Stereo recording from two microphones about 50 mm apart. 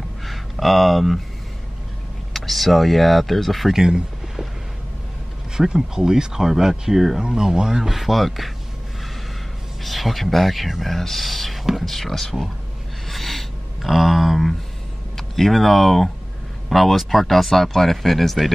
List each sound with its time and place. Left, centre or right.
0.2 s speech: centre
2.3 s speech: centre
3.7 s speech: centre
5.6 s speech: centre
9.8 s speech: centre
13.1 s a sound: centre
15.1 s speech: centre